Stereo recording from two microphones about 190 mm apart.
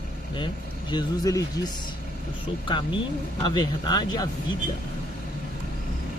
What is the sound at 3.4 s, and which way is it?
Speech, 20° left (ahead or behind).